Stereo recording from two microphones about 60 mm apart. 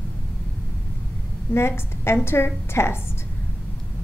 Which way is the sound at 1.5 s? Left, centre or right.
Left.